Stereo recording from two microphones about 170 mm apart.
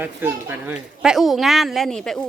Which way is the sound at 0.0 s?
15° right (ahead or behind).